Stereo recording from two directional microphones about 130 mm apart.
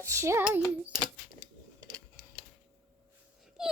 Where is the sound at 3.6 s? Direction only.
5° right (ahead or behind).